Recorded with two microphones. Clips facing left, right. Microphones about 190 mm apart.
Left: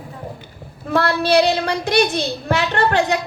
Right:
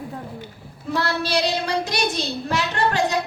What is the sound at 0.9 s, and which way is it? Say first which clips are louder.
A child's voice: left 6 dB; 55° left (ahead or behind).